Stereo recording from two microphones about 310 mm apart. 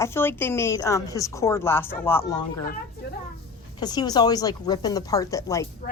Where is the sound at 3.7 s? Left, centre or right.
Centre.